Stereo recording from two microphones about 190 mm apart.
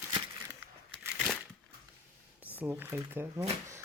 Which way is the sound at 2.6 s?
10° right (ahead or behind).